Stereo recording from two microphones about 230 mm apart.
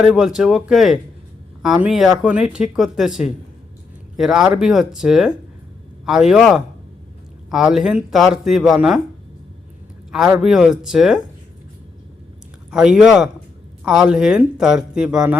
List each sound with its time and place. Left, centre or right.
0.0 s speech: centre
10.1 s speech: centre
12.7 s speech: centre